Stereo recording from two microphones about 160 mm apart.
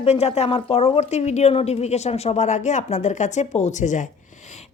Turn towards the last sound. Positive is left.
turn(degrees=50)  # may be behind; listen again after turning